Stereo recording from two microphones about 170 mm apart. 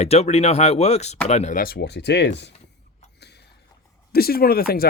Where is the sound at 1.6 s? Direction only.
70° left (ahead or behind); by 2.3 s 90° left.